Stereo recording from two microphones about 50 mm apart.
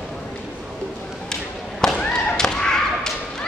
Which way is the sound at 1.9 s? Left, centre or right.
Centre.